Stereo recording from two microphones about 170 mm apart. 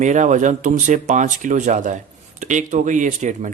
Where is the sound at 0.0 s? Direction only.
45° right (ahead or behind).